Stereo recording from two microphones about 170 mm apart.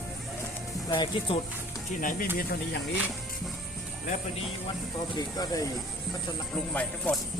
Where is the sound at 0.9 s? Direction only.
30° left (ahead or behind).